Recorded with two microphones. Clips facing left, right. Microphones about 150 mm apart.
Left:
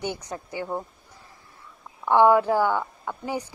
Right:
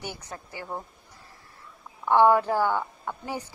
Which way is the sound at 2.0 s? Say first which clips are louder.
Left 2 dB; 15° left (ahead or behind).